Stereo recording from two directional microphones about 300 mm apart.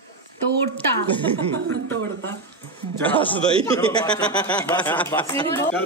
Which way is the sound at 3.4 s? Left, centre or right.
Centre.